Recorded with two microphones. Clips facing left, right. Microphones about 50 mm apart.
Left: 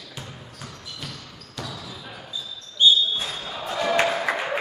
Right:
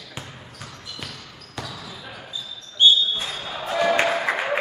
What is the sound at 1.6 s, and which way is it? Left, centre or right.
Basketball bounce, centre.